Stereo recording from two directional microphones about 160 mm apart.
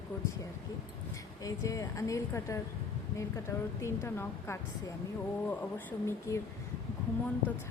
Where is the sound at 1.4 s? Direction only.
20° left (ahead or behind).